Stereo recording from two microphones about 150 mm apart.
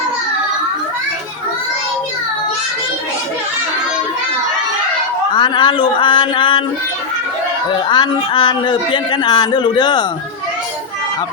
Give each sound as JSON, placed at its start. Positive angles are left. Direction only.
{"t": 5.3, "sound": "speech", "side_deg": 30}
{"t": 7.9, "sound": "speech", "side_deg": 30}